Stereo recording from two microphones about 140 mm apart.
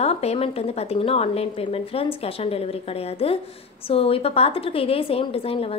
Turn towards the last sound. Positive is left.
turn(degrees=45)  # may be behind; listen again after turning